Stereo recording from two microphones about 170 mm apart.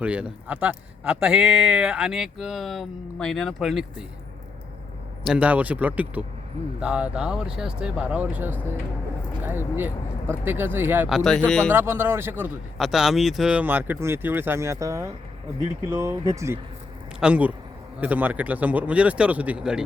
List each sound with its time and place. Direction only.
0.0 s a man's voice: 5° right (ahead or behind)
5.2 s a man's voice: 5° right (ahead or behind)
11.2 s a man's voice: 5° left (ahead or behind)
11.7 s speech: 15° right (ahead or behind)
12.7 s speech: centre (ahead or behind)
17.2 s speech: 5° right (ahead or behind)